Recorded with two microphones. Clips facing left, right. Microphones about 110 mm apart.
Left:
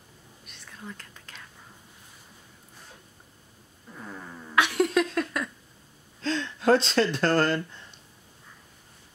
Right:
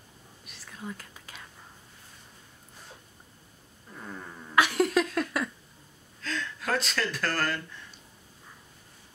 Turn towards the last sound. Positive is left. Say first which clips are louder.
# left 6 dB
turn(degrees=25)  # may be behind; listen again after turning